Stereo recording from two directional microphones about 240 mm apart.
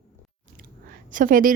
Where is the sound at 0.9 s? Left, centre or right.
Right.